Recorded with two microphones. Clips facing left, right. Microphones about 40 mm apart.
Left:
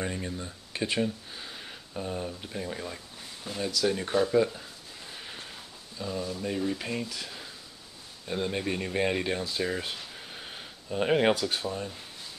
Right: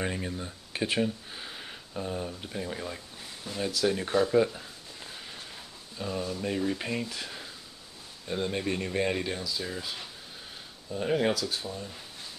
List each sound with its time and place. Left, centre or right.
0.0 s speech: centre
5.1 s a sound: centre
5.9 s speech: centre
8.3 s speech: centre
9.4 s speech: left
10.9 s speech: left